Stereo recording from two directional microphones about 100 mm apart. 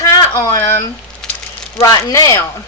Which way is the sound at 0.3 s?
35° left (ahead or behind).